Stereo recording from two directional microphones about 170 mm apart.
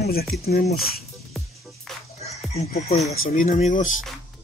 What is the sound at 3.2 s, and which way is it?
Speech, 55° left (ahead or behind).